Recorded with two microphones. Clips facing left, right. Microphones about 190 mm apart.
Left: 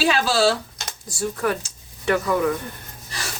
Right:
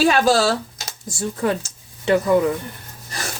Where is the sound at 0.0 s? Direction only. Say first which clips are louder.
Right 5 dB; 45° right (ahead or behind).